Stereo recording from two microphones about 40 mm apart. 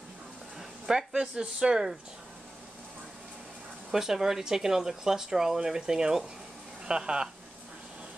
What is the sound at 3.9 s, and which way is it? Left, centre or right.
Speech, centre.